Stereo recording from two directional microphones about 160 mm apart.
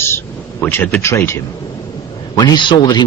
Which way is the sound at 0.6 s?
10° left (ahead or behind).